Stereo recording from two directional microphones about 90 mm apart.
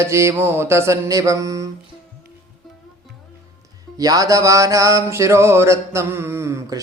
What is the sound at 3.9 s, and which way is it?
Music, 40° right (ahead or behind).